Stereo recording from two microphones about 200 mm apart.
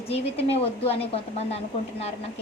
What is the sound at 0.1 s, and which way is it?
Speech, 30° left (ahead or behind).